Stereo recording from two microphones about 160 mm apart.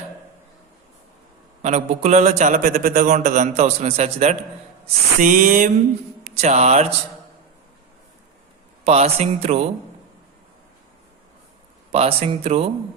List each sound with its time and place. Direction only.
1.6 s a man's voice: 45° right (ahead or behind)
5.2 s a sound: 55° right (ahead or behind)
6.3 s a man's voice: 45° right (ahead or behind)
8.8 s speech: 40° right (ahead or behind)
11.9 s speech: 40° right (ahead or behind)